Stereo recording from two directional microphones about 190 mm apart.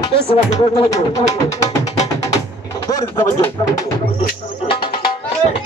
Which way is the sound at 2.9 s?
15° left (ahead or behind).